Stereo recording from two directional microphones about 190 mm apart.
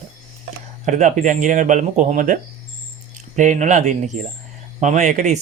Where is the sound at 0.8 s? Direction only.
40° right (ahead or behind).